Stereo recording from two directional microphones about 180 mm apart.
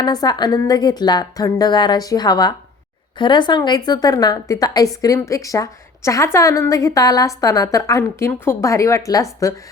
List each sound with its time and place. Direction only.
0.0 s a woman's voice: 20° left (ahead or behind)